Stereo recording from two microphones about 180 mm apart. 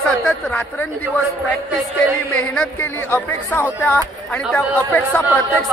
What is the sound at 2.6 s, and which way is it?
Speech, 10° left (ahead or behind).